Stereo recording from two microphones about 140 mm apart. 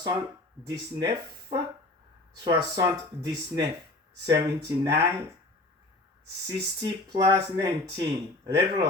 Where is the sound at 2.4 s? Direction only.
25° right (ahead or behind).